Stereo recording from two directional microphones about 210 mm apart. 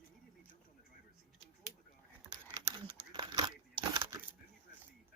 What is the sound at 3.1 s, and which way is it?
Crumpling, 20° right (ahead or behind).